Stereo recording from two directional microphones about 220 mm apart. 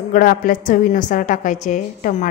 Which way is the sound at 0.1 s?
40° left (ahead or behind).